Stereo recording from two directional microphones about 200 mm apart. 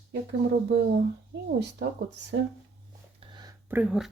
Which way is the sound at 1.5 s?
55° right (ahead or behind).